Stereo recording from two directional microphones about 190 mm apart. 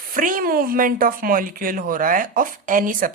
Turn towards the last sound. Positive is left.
turn(degrees=-45)  # may be behind; listen again after turning